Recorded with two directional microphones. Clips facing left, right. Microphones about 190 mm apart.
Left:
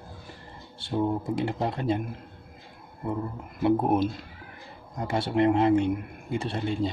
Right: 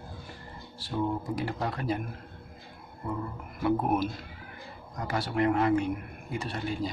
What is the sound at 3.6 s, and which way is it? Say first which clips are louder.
Speech: left 4 dB; 25° left (ahead or behind).